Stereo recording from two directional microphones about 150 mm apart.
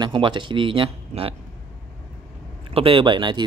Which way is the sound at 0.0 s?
35° right (ahead or behind).